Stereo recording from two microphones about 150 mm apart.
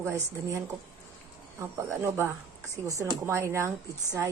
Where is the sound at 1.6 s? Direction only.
20° right (ahead or behind).